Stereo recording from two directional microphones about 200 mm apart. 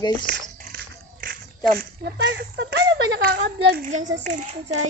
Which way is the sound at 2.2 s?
60° right (ahead or behind).